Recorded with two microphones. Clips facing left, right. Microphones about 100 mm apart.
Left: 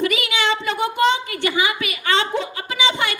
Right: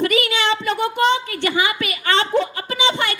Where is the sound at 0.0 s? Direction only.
40° right (ahead or behind).